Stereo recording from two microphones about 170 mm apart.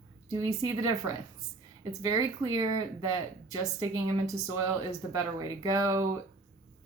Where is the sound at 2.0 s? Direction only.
20° right (ahead or behind).